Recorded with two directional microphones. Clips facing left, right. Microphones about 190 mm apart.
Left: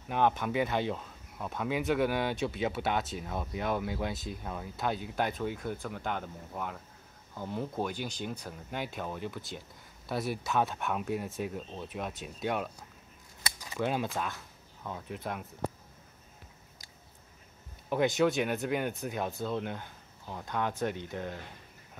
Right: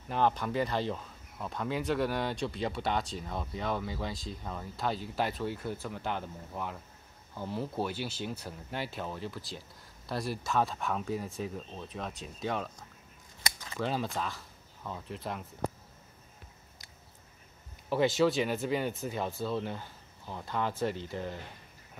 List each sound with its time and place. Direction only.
0.1 s speech: 5° left (ahead or behind)
10.0 s speech: centre (ahead or behind)
17.9 s speech: centre (ahead or behind)